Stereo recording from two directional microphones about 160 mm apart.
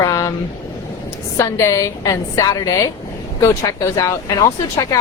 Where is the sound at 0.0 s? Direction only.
20° left (ahead or behind).